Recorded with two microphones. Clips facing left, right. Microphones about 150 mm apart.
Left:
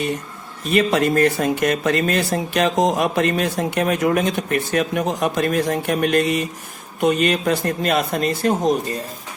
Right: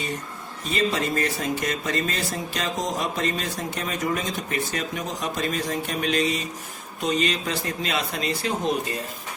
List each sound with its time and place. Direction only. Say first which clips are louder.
0.7 s speech: left 7 dB; 65° left (ahead or behind)